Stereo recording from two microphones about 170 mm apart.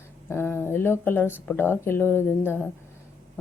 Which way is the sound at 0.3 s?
15° left (ahead or behind).